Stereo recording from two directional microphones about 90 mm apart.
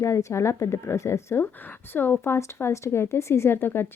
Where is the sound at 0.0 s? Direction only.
35° left (ahead or behind).